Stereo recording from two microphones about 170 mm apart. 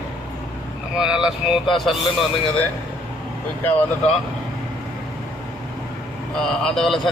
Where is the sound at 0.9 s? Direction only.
5° right (ahead or behind).